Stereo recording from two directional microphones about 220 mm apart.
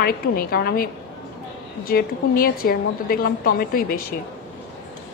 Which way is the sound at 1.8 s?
40° left (ahead or behind).